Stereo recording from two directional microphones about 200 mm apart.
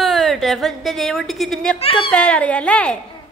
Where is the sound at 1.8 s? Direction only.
25° left (ahead or behind).